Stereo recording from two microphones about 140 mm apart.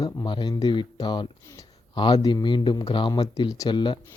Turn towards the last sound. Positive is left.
turn(degrees=35)  # may be behind; listen again after turning